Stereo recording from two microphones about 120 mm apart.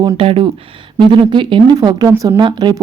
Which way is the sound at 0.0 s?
45° right (ahead or behind).